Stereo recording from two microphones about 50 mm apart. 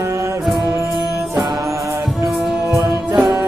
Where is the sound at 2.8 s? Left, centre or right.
Right.